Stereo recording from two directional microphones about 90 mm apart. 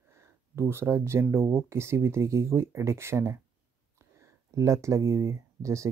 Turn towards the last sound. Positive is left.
turn(degrees=-35)  # may be behind; listen again after turning